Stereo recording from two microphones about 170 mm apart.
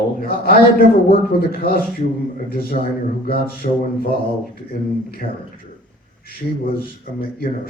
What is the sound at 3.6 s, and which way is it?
Speech, 60° left (ahead or behind).